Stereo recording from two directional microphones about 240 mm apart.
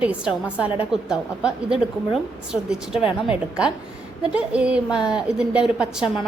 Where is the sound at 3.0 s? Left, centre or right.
Left.